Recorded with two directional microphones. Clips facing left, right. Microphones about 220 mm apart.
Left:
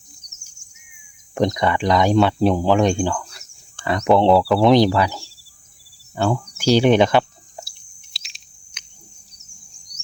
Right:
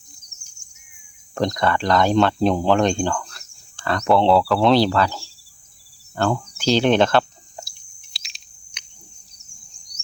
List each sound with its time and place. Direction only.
1.4 s speech: 15° left (ahead or behind)
4.3 s speech: 5° left (ahead or behind)
4.7 s speech: 15° left (ahead or behind)
8.1 s cricket: centre (ahead or behind)